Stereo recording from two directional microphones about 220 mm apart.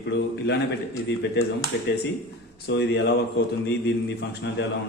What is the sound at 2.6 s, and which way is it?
Speech, 50° left (ahead or behind).